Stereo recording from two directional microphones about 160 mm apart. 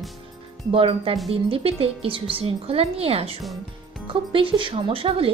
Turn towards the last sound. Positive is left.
turn(degrees=-35)  # may be behind; listen again after turning